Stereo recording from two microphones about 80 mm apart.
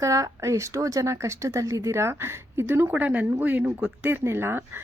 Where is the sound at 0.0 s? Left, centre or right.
Right.